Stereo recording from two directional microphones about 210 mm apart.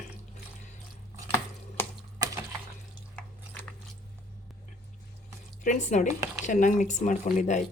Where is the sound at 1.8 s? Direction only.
10° left (ahead or behind).